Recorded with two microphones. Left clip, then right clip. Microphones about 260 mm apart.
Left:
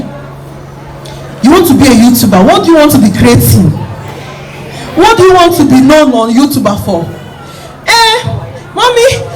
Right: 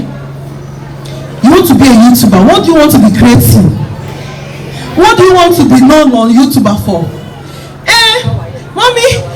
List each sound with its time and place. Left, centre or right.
1.4 s a woman's voice: left
4.8 s a woman's voice: left
7.9 s music: left
8.7 s a sound: left